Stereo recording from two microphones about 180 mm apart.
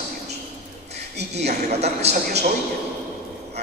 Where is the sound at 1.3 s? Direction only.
35° right (ahead or behind).